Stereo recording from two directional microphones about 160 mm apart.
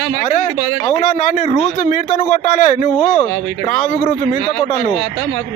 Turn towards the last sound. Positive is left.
turn(degrees=50)  # may be behind; listen again after turning